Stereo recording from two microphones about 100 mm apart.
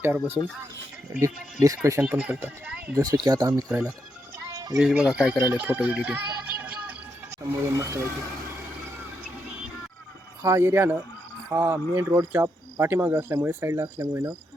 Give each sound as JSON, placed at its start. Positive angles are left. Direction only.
{"t": 1.2, "sound": "speech", "side_deg": -35}
{"t": 2.0, "sound": "speech", "side_deg": -15}
{"t": 2.9, "sound": "speech", "side_deg": -40}
{"t": 3.7, "sound": "speech", "side_deg": -10}
{"t": 4.4, "sound": "music", "side_deg": -35}
{"t": 4.8, "sound": "speech", "side_deg": -10}
{"t": 7.4, "sound": "speech", "side_deg": -30}
{"t": 10.4, "sound": "speech", "side_deg": -25}